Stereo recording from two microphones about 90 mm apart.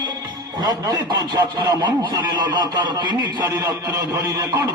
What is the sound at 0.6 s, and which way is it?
A man's voice, 45° right (ahead or behind).